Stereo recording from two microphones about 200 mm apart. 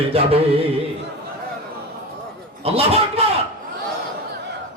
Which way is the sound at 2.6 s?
30° right (ahead or behind).